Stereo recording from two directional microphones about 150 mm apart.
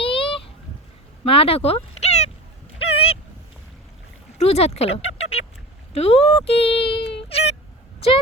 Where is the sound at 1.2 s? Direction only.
40° left (ahead or behind).